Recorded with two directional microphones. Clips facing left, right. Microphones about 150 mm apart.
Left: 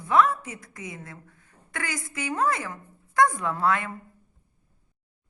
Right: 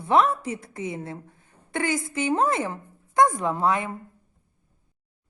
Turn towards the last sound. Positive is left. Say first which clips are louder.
# right 2 dB
turn(degrees=-20)  # may be behind; listen again after turning